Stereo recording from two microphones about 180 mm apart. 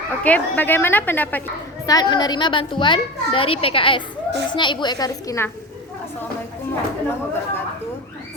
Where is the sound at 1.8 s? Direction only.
25° left (ahead or behind).